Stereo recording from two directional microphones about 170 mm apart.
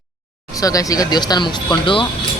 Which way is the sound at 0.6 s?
20° left (ahead or behind).